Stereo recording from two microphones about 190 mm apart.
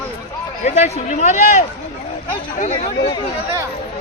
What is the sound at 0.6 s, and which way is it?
A man's voice, 40° left (ahead or behind).